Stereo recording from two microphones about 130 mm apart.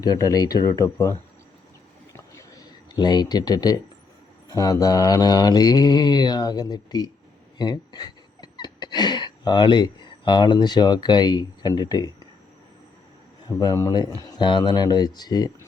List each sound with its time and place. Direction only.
0.0 s speech: 30° left (ahead or behind)
2.1 s a sound: 25° left (ahead or behind)
4.4 s mantra: 30° left (ahead or behind)
7.6 s speech: 30° left (ahead or behind)
13.7 s speech: 30° left (ahead or behind)
14.2 s mantra: 30° left (ahead or behind)